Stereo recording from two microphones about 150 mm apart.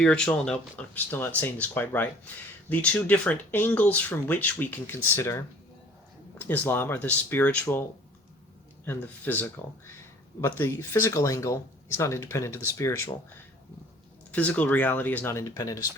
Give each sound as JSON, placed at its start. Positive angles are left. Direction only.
{"t": 0.0, "sound": "speech", "side_deg": 5}
{"t": 6.4, "sound": "speech", "side_deg": 15}
{"t": 14.3, "sound": "speech", "side_deg": 10}